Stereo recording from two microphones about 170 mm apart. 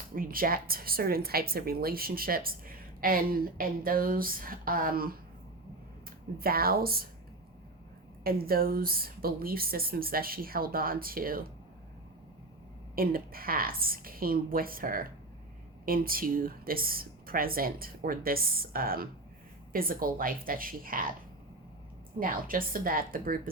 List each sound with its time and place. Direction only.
0.2 s speech: 55° right (ahead or behind)
8.2 s speech: 60° right (ahead or behind)
13.0 s speech: 60° right (ahead or behind)
22.2 s speech: 55° right (ahead or behind)